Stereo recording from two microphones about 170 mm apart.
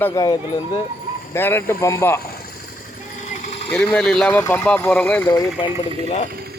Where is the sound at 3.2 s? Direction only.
45° left (ahead or behind).